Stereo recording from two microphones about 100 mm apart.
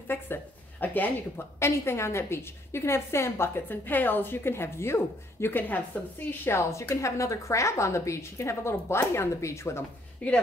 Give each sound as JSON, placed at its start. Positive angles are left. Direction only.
{"t": 0.1, "sound": "a woman's voice", "side_deg": 20}
{"t": 10.2, "sound": "a woman's voice", "side_deg": 10}